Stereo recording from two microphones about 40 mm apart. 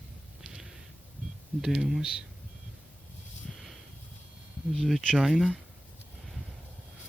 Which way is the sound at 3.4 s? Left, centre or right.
Centre.